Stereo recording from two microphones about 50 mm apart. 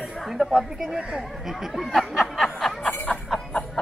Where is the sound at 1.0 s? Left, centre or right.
Centre.